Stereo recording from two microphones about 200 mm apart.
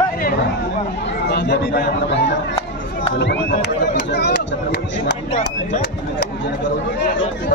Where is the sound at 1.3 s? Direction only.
55° left (ahead or behind).